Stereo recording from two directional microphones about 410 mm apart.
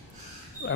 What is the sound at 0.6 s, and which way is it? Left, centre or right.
Speech, left.